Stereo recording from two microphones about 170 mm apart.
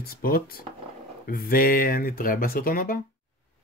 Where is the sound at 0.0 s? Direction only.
60° left (ahead or behind).